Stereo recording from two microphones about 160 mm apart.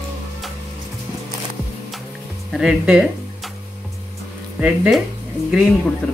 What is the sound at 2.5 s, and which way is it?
Speech, 5° right (ahead or behind).